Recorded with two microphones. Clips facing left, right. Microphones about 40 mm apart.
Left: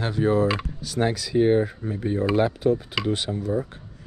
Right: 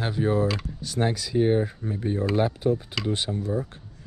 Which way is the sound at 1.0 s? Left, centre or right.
Left.